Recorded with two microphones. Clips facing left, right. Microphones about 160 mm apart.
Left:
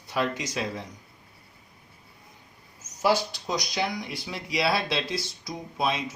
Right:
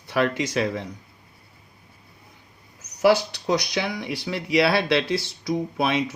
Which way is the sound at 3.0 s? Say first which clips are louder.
Right 6 dB; 70° right (ahead or behind).